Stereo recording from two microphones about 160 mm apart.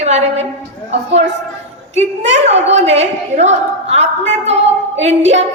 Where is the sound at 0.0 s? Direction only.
45° right (ahead or behind).